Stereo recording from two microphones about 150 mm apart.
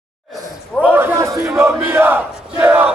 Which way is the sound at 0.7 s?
10° right (ahead or behind).